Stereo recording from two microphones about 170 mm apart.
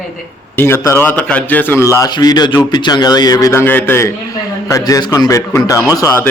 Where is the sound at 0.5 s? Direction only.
15° left (ahead or behind).